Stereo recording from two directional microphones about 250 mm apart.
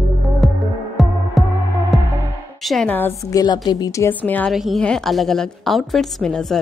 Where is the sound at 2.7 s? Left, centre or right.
Centre.